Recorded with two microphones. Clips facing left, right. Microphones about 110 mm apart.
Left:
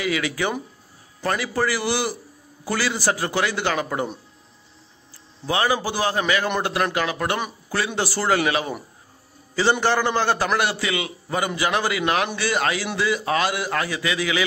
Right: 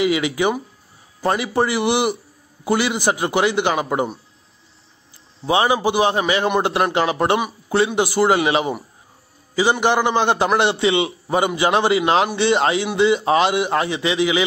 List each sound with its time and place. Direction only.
0.0 s a man's voice: 20° right (ahead or behind)
5.5 s a man's voice: 20° right (ahead or behind)